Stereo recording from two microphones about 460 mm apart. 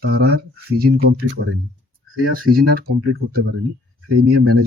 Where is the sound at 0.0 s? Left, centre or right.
Right.